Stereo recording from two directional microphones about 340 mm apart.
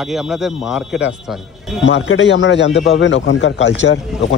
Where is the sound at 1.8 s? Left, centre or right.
Left.